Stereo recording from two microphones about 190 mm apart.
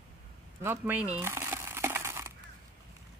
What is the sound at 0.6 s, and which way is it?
Speech, 10° right (ahead or behind).